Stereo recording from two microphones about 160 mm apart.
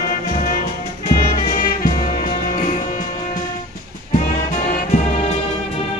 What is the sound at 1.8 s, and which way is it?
Music, 60° left (ahead or behind).